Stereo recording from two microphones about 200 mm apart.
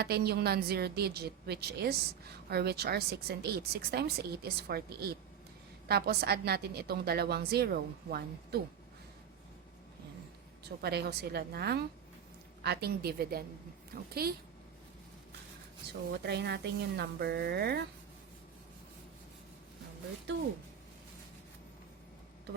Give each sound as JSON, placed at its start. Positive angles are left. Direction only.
{"t": 0.0, "sound": "a woman's voice", "side_deg": -50}
{"t": 10.6, "sound": "a woman's voice", "side_deg": -55}
{"t": 15.9, "sound": "a woman's voice", "side_deg": -55}